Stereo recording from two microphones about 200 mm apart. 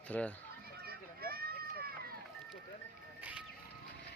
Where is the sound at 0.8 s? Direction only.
50° right (ahead or behind).